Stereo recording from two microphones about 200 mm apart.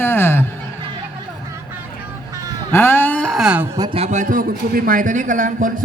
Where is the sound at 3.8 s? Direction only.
25° right (ahead or behind).